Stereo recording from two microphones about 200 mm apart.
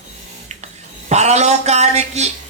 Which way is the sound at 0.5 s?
35° right (ahead or behind).